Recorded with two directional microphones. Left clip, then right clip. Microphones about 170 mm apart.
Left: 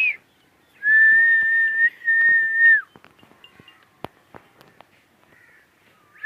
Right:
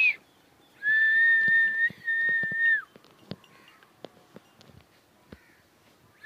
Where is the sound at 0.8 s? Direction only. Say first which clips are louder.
Left 7 dB; 10° right (ahead or behind).